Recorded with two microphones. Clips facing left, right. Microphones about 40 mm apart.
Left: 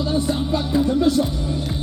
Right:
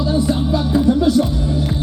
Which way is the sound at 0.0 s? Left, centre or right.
Centre.